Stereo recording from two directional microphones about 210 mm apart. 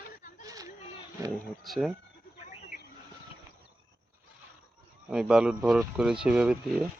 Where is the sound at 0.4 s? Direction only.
15° right (ahead or behind).